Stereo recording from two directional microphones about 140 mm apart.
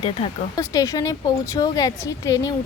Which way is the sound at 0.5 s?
25° left (ahead or behind).